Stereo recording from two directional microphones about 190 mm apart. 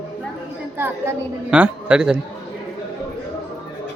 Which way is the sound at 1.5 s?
5° right (ahead or behind).